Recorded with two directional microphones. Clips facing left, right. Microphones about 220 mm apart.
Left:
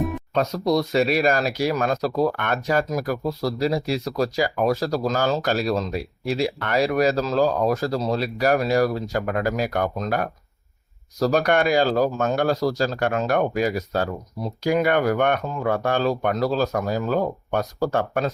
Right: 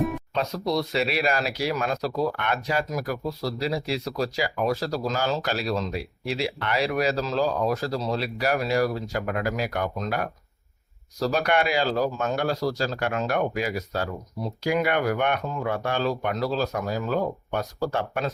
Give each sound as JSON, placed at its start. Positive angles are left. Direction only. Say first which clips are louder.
{"t": 0.3, "sound": "speech", "louder": "left 6 dB", "side_deg": 45}
{"t": 11.2, "sound": "speech", "louder": "left 4 dB", "side_deg": 45}